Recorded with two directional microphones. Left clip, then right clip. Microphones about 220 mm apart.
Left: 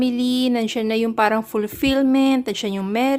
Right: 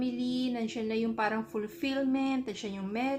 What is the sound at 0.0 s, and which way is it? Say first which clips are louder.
A woman's voice: left 13 dB; 45° left (ahead or behind).